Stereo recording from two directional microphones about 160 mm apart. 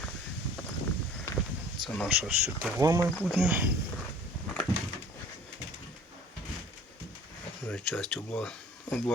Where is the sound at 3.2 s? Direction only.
5° right (ahead or behind).